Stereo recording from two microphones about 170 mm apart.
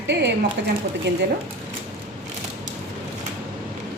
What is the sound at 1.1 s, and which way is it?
Speech, 80° right.